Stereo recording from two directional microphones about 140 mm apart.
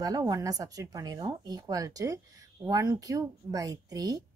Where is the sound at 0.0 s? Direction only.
25° right (ahead or behind).